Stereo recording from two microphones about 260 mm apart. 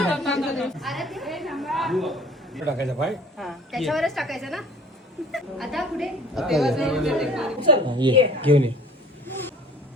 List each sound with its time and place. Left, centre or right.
0.1 s a woman's voice: centre
7.6 s a woman's voice: centre